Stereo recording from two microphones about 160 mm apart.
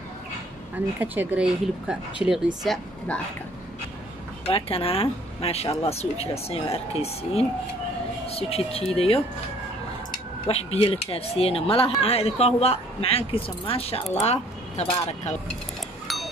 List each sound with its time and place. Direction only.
1.0 s speech: 10° right (ahead or behind)
4.5 s speech: 35° left (ahead or behind)
10.4 s speech: 35° left (ahead or behind)